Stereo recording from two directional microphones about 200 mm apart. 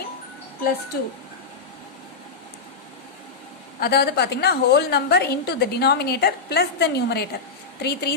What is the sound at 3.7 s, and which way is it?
A woman's voice, 50° left (ahead or behind).